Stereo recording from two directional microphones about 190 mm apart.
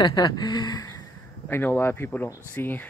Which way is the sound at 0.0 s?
20° left (ahead or behind).